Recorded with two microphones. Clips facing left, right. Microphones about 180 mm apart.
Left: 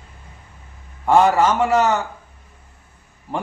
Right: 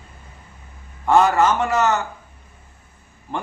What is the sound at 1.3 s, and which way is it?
Speech, 10° left (ahead or behind).